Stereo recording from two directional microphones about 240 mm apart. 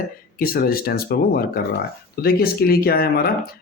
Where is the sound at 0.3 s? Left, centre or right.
Left.